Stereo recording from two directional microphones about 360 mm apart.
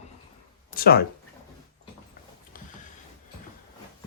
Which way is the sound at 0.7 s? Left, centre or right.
Left.